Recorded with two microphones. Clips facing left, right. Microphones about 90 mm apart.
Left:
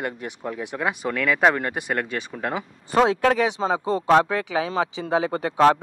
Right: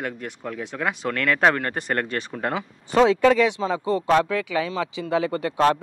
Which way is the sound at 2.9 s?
40° left (ahead or behind).